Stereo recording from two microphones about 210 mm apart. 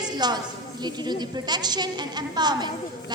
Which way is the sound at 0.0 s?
20° right (ahead or behind).